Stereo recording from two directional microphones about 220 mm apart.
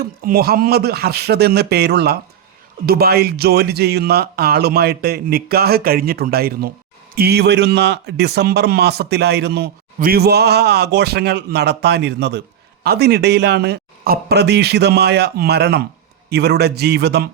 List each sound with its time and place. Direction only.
0.0 s a man's voice: 45° right (ahead or behind)